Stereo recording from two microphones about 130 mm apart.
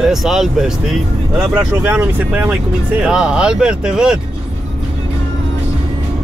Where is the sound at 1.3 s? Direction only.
15° right (ahead or behind).